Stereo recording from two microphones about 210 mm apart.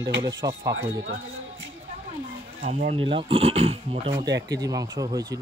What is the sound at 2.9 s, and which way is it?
Speech, 25° right (ahead or behind).